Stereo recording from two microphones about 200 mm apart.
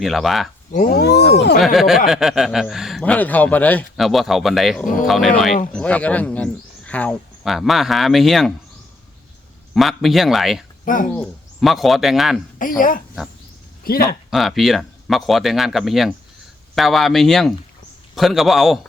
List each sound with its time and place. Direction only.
0.0 s a man's voice: centre (ahead or behind)
0.7 s speech: 45° left (ahead or behind)
1.5 s a man's voice: centre (ahead or behind)
9.7 s a man's voice: centre (ahead or behind)
10.8 s speech: 40° left (ahead or behind)
11.2 s a man's voice: centre (ahead or behind)
12.5 s speech: 45° left (ahead or behind)
14.3 s a man's voice: centre (ahead or behind)